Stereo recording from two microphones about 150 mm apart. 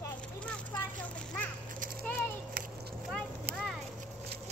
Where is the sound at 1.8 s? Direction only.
70° right (ahead or behind).